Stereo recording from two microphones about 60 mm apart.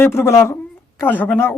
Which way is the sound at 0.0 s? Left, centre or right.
Left.